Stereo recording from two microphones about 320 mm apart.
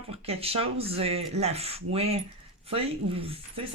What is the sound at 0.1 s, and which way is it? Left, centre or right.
Speech, centre.